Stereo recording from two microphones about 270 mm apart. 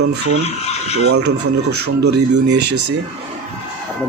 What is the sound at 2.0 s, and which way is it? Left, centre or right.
Speech, right.